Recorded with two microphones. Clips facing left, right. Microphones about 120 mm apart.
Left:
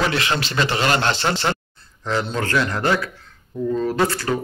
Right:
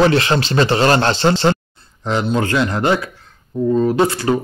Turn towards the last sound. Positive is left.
turn(degrees=-20)  # may be behind; listen again after turning